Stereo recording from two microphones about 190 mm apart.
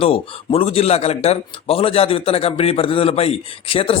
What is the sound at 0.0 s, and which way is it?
A man's voice, 30° left (ahead or behind).